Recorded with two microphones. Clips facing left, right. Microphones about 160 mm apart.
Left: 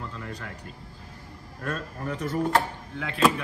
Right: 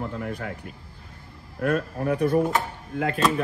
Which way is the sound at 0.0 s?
50° right (ahead or behind).